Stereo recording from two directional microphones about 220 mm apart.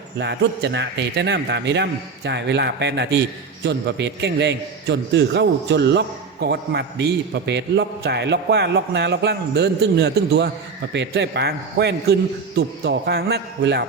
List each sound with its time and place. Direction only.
0.2 s a man's voice: 50° right (ahead or behind)